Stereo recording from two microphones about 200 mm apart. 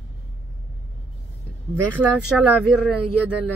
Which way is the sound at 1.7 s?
5° right (ahead or behind).